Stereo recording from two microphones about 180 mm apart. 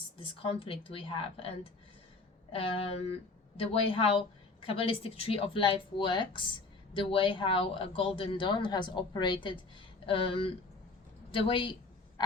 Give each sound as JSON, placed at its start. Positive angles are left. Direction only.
{"t": 0.2, "sound": "a woman's voice", "side_deg": 30}
{"t": 2.5, "sound": "a woman's voice", "side_deg": 30}
{"t": 11.3, "sound": "a sound", "side_deg": 30}